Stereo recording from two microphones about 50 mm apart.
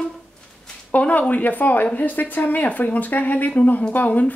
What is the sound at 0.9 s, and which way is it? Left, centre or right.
Speech, left.